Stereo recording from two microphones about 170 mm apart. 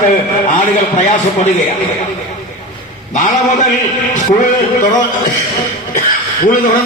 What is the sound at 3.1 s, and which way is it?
A man's voice, 45° left (ahead or behind).